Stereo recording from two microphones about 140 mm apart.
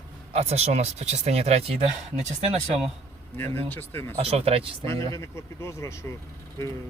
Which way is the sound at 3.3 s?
15° left (ahead or behind).